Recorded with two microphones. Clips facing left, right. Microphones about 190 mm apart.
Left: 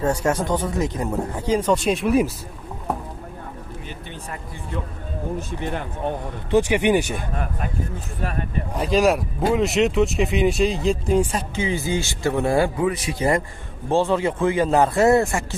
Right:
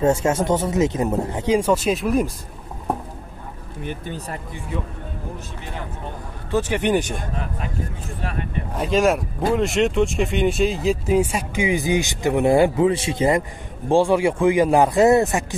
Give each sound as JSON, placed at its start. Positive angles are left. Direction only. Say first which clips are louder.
{"t": 0.0, "sound": "speech", "louder": "right 3 dB", "side_deg": -25}
{"t": 3.8, "sound": "speech", "louder": "right 6 dB", "side_deg": -40}
{"t": 6.5, "sound": "speech", "louder": "left 2 dB", "side_deg": 10}
{"t": 8.7, "sound": "speech", "louder": "even", "side_deg": 0}